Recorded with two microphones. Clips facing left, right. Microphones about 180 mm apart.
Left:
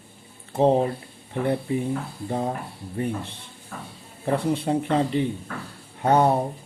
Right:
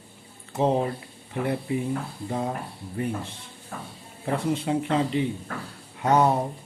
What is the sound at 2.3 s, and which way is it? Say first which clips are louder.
Speech: left 2 dB; 40° left (ahead or behind).